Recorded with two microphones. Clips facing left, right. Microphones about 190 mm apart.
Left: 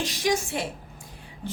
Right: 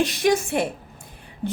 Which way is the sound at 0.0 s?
60° right (ahead or behind).